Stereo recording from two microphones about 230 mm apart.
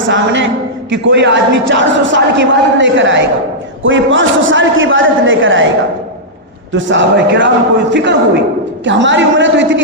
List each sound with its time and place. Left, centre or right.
0.1 s a man's voice: right
6.7 s a man's voice: right